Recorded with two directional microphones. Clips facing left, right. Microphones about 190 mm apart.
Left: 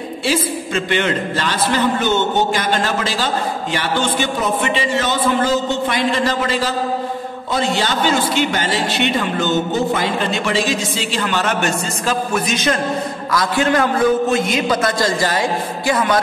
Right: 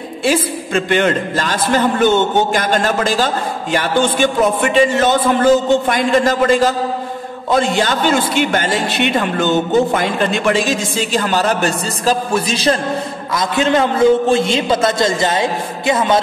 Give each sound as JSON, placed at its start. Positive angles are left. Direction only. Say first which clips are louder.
{"t": 0.2, "sound": "a man's voice", "louder": "right 4 dB", "side_deg": -50}
{"t": 13.3, "sound": "a man's voice", "louder": "right 2 dB", "side_deg": -20}